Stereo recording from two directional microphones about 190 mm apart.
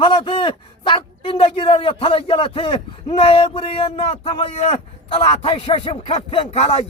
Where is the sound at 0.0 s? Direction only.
25° left (ahead or behind).